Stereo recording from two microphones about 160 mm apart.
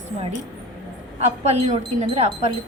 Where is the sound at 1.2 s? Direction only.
40° right (ahead or behind).